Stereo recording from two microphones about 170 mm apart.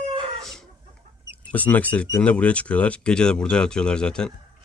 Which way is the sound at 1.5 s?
10° left (ahead or behind).